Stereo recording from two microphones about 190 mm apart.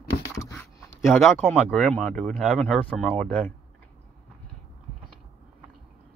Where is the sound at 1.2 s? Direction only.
Centre (ahead or behind).